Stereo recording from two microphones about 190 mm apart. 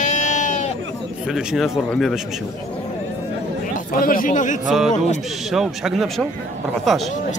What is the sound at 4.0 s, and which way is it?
Speech, 45° left (ahead or behind).